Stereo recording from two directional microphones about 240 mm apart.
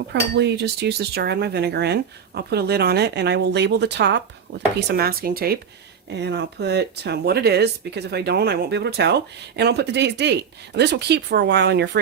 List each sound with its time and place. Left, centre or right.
0.1 s speech: right